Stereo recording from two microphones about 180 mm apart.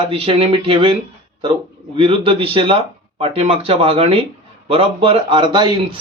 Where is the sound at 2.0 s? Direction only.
30° right (ahead or behind).